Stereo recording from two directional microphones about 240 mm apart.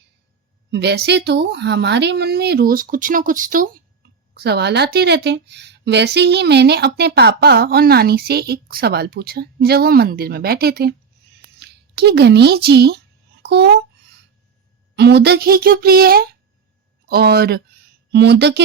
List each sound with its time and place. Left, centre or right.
0.7 s speech: right
4.0 s a sound: right
4.4 s speech: right
14.9 s speech: right